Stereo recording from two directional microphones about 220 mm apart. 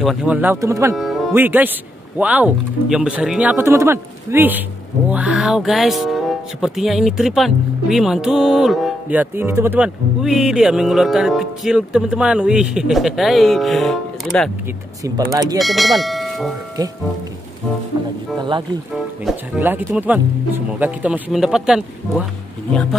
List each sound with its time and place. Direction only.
0.0 s speech: centre (ahead or behind)
0.9 s speech: centre (ahead or behind)
15.3 s speech: 15° right (ahead or behind)
15.6 s speech: centre (ahead or behind)
19.2 s speech: 5° right (ahead or behind)